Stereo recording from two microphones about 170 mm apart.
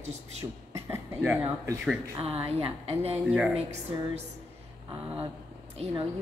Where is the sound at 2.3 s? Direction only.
35° right (ahead or behind).